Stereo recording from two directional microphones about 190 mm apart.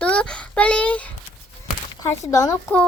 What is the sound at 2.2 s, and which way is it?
Speech, 15° left (ahead or behind).